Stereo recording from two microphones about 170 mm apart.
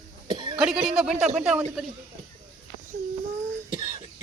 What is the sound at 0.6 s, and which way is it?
Speech, centre (ahead or behind).